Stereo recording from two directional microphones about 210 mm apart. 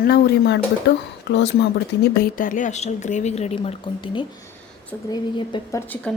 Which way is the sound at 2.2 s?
40° left (ahead or behind).